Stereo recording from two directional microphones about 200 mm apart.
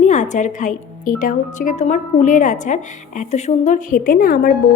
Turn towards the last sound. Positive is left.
turn(degrees=45)  # may be behind; listen again after turning